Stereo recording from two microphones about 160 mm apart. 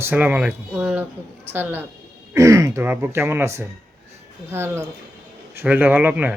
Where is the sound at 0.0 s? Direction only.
10° right (ahead or behind).